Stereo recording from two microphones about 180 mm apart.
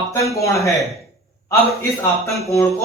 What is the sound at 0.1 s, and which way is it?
Speech, 15° left (ahead or behind).